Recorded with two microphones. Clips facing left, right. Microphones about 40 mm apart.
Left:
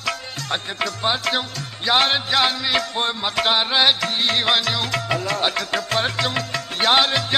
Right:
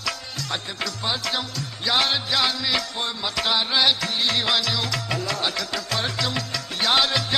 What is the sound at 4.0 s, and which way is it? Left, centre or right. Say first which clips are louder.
Music: left 3 dB; left.